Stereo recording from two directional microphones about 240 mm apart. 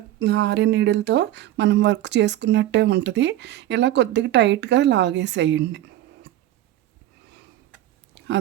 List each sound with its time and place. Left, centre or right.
0.2 s speech: right